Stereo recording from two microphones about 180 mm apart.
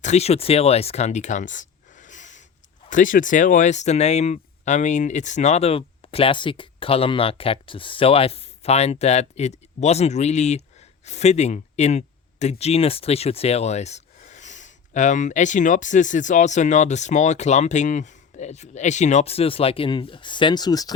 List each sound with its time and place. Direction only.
0.0 s speech: 35° left (ahead or behind); by 20.9 s 20° left (ahead or behind)